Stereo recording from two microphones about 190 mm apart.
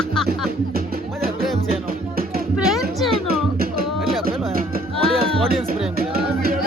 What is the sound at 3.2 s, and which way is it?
Music, 50° right (ahead or behind).